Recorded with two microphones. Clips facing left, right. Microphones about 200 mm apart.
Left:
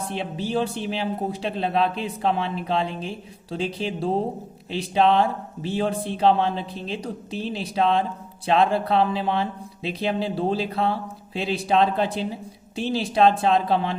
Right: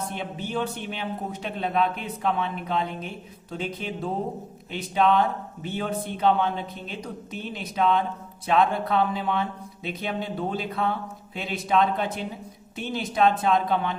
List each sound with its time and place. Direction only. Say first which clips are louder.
0.2 s speech: left 6 dB; 30° left (ahead or behind)